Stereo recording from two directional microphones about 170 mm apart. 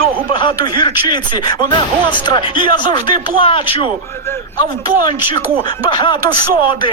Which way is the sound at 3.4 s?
30° left (ahead or behind).